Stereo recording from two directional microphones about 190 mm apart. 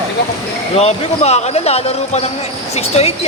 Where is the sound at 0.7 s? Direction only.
35° left (ahead or behind).